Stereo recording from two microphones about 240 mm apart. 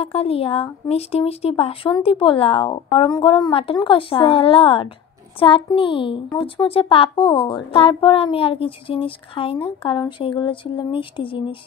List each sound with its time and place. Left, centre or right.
0.0 s speech: left